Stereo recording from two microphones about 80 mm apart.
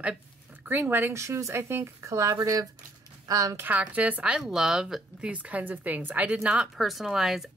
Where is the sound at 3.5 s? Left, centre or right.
Right.